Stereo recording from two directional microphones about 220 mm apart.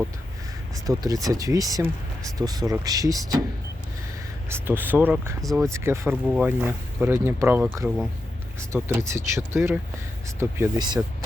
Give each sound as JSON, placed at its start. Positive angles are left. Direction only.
{"t": 0.9, "sound": "speech", "side_deg": -15}
{"t": 4.4, "sound": "speech", "side_deg": -10}
{"t": 5.4, "sound": "speech", "side_deg": 0}
{"t": 5.6, "sound": "speech", "side_deg": -10}